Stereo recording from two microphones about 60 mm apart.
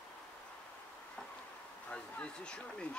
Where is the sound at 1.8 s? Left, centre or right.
Centre.